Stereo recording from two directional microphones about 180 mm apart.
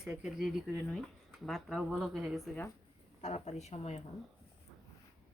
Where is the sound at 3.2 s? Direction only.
40° left (ahead or behind).